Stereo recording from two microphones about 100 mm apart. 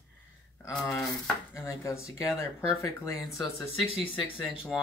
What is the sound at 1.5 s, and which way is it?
Speech, 30° left (ahead or behind).